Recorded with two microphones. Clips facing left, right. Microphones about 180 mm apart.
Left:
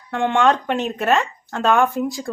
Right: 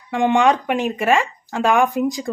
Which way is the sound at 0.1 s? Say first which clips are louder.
Right 2 dB; 15° right (ahead or behind).